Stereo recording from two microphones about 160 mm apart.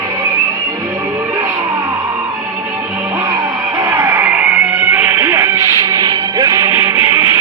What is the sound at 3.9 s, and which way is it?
Music, 15° right (ahead or behind).